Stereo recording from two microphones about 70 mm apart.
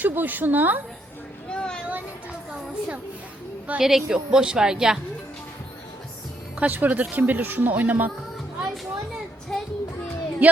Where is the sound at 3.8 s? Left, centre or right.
Centre.